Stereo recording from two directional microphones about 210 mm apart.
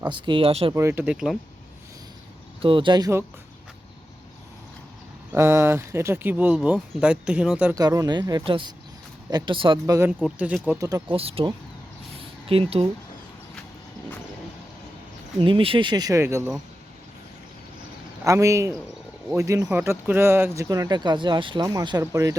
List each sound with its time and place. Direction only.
0.0 s speech: 25° right (ahead or behind)
0.7 s speech: 10° right (ahead or behind)
2.6 s speech: 25° right (ahead or behind)
5.3 s speech: 10° right (ahead or behind)
7.8 s speech: 20° right (ahead or behind)
10.1 s speech: 5° right (ahead or behind); by 11.5 s 25° right (ahead or behind)
12.1 s a sound: 25° right (ahead or behind)
15.4 s speech: 25° right (ahead or behind)
18.3 s speech: 15° right (ahead or behind)